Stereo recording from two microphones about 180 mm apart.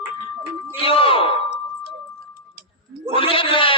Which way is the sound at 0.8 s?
30° left (ahead or behind).